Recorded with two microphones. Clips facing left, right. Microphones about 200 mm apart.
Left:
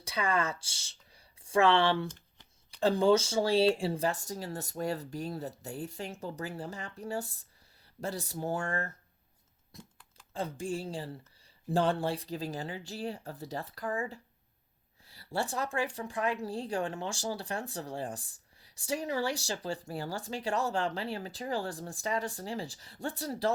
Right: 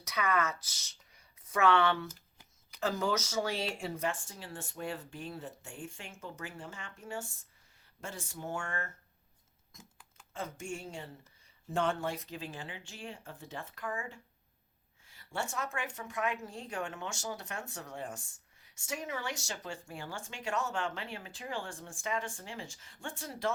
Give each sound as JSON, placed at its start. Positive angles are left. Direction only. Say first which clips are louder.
{"t": 0.0, "sound": "speech", "louder": "left 1 dB", "side_deg": 30}